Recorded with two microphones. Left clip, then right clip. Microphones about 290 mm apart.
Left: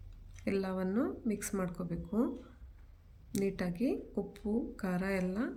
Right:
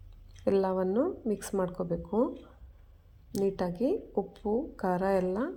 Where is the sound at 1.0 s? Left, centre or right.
Centre.